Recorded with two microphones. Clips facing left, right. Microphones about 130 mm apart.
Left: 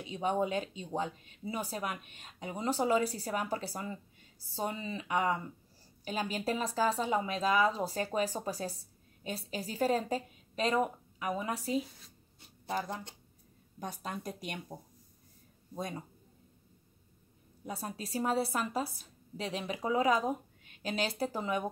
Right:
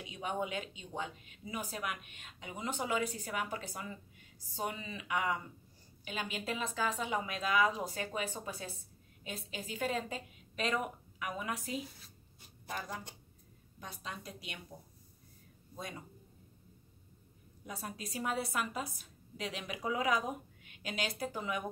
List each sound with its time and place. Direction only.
0.0 s speech: 35° left (ahead or behind)
13.7 s speech: 45° left (ahead or behind)
17.6 s speech: 35° left (ahead or behind)